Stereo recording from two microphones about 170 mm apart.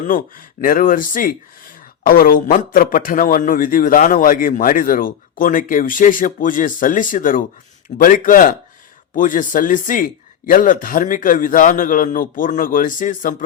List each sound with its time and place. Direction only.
0.1 s speech: 55° left (ahead or behind)